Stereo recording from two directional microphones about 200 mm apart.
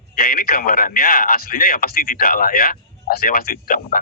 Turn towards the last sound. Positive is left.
turn(degrees=45)  # may be behind; listen again after turning